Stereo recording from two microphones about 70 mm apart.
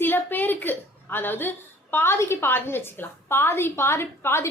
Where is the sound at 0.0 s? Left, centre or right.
Left.